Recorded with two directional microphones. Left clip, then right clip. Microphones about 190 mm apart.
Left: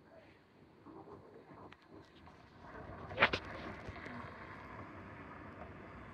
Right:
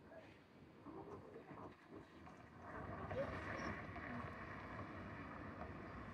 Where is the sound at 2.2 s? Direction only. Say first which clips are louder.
Left 1 dB; 10° right (ahead or behind).